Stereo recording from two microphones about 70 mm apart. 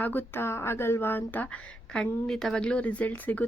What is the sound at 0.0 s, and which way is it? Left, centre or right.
Speech, left.